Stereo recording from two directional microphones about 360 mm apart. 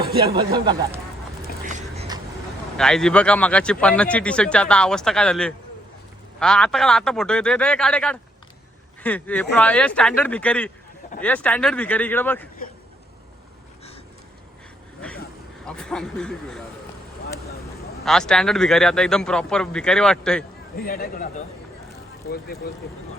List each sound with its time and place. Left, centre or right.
0.0 s speech: right
0.5 s speech: centre
1.6 s a sound: centre
2.7 s speech: centre
15.0 s speech: centre
18.0 s speech: centre
20.7 s speech: left